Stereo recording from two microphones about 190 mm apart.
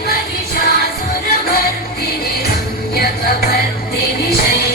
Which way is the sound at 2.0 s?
55° left (ahead or behind).